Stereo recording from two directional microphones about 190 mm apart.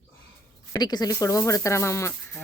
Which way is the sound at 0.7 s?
20° left (ahead or behind).